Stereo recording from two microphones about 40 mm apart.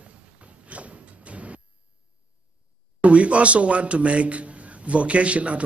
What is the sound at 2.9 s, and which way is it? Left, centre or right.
Speech, right.